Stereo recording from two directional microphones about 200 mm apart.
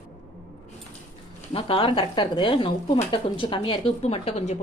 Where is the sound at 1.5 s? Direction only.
25° left (ahead or behind).